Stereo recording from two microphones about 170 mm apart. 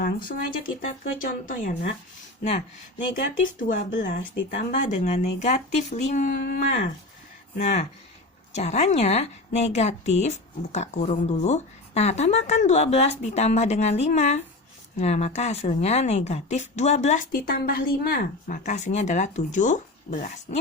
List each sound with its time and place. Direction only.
0.0 s speech: 55° left (ahead or behind)
2.4 s a woman's voice: 40° left (ahead or behind)
3.7 s speech: 50° left (ahead or behind)
7.6 s a woman's voice: 45° left (ahead or behind)
17.3 s speech: 60° left (ahead or behind)